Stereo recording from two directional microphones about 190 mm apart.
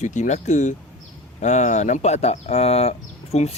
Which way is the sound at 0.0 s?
40° left (ahead or behind).